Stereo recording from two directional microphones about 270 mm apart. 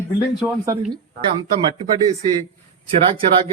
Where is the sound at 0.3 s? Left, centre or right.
Centre.